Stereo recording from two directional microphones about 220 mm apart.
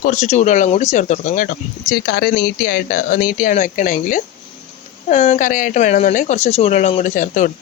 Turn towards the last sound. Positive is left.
turn(degrees=35)  # may be behind; listen again after turning